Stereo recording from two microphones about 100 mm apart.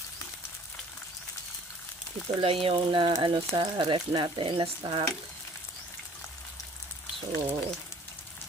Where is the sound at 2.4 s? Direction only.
65° right (ahead or behind).